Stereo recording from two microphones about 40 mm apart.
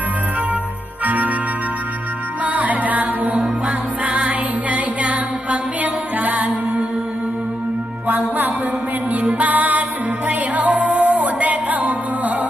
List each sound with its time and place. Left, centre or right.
1.0 s organ: right
2.4 s music: right
8.0 s music: right